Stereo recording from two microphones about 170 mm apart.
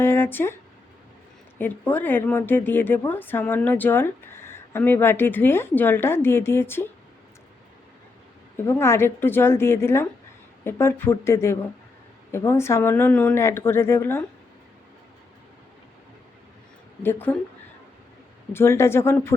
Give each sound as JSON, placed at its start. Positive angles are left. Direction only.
{"t": 0.0, "sound": "speech", "side_deg": 15}
{"t": 1.5, "sound": "speech", "side_deg": 10}
{"t": 8.6, "sound": "speech", "side_deg": 15}
{"t": 17.0, "sound": "speech", "side_deg": 10}
{"t": 18.5, "sound": "speech", "side_deg": 15}